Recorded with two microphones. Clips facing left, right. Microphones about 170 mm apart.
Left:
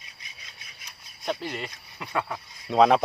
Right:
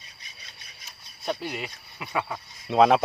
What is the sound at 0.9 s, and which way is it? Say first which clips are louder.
Speech: even; 5° right (ahead or behind).